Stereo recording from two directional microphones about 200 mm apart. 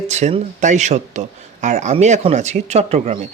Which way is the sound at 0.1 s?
35° right (ahead or behind).